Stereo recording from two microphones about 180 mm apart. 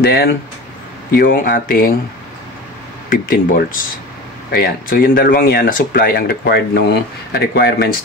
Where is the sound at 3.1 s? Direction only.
50° left (ahead or behind).